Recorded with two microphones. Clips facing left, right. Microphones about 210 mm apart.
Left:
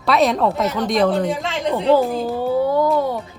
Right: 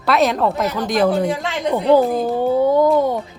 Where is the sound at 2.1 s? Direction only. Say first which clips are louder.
Right 3 dB; 20° right (ahead or behind).